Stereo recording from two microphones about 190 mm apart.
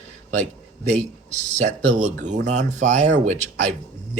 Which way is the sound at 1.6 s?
40° right (ahead or behind).